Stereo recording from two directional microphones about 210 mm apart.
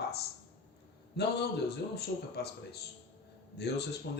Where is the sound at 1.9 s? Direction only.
50° left (ahead or behind).